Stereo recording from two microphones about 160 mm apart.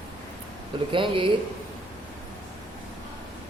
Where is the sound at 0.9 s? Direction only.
30° right (ahead or behind).